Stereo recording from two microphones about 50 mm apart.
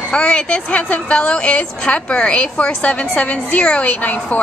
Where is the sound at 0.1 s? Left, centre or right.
Left.